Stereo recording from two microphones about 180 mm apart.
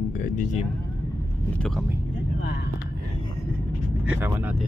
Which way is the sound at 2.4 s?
70° left (ahead or behind).